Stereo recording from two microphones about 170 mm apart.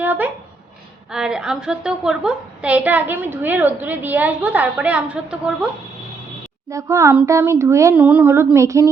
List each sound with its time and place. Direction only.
0.0 s a sound: 10° right (ahead or behind)
1.1 s a woman's voice: 5° right (ahead or behind)
6.7 s a woman's voice: 20° right (ahead or behind)